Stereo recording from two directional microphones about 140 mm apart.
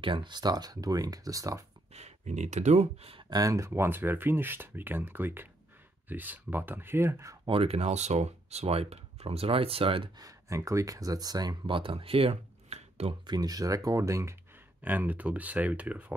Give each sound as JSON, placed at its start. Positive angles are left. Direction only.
{"t": 0.0, "sound": "speech", "side_deg": -35}
{"t": 2.0, "sound": "speech", "side_deg": -55}
{"t": 3.3, "sound": "speech", "side_deg": -25}
{"t": 7.4, "sound": "speech", "side_deg": -45}
{"t": 10.2, "sound": "speech", "side_deg": -25}
{"t": 13.3, "sound": "speech", "side_deg": -25}